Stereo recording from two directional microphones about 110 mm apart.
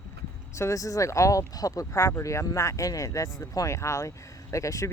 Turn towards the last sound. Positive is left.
turn(degrees=30)  # may be behind; listen again after turning